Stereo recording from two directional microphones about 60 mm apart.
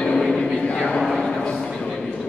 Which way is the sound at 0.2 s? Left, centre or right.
Centre.